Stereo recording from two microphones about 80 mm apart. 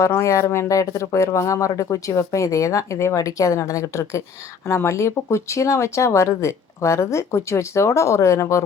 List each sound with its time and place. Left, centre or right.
0.0 s speech: left